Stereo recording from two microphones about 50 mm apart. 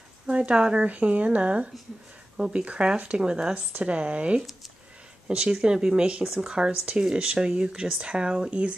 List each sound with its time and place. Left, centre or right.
0.3 s speech: right
2.3 s speech: centre
3.5 s speech: right